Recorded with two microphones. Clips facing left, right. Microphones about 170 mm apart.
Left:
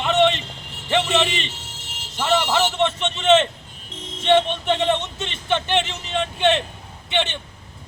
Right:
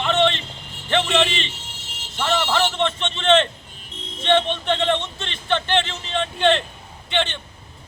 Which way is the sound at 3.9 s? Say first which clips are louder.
Left 2 dB; 90° left.